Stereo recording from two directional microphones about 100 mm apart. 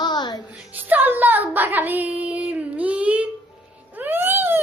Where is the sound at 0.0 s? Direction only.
45° left (ahead or behind).